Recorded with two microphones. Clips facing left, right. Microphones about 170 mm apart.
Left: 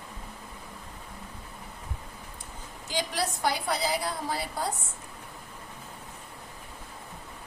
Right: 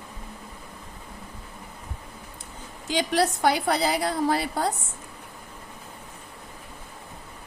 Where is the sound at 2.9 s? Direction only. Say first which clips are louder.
Right 7 dB; 70° right (ahead or behind).